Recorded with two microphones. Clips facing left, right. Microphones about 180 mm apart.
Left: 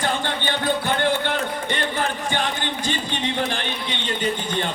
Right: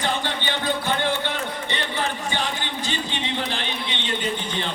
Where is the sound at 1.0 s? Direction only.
50° left (ahead or behind).